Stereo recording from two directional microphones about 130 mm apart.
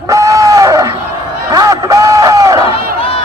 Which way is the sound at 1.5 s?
25° right (ahead or behind).